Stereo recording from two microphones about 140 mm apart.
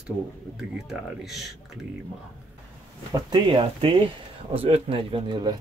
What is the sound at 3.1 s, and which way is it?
Speech, 30° right (ahead or behind).